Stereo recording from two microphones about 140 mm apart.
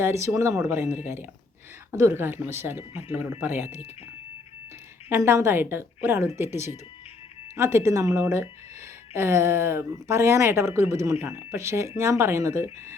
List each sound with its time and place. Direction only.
0.3 s speech: 20° right (ahead or behind)
1.9 s a woman's voice: 20° right (ahead or behind)
5.0 s a woman's voice: 20° right (ahead or behind)